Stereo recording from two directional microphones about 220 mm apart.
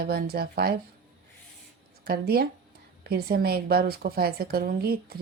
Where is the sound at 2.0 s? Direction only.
45° right (ahead or behind).